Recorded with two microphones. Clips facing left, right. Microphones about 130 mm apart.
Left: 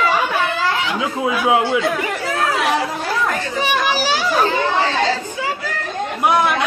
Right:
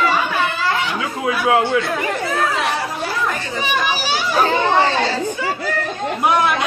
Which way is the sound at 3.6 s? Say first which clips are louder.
Left 2 dB; 85° left.